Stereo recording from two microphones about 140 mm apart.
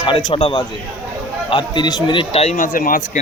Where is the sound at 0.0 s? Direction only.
35° left (ahead or behind).